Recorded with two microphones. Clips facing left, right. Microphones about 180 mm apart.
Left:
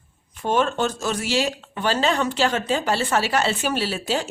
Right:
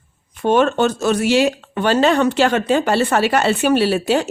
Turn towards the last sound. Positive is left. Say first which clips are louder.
# right 8 dB
turn(degrees=-65)  # may be behind; listen again after turning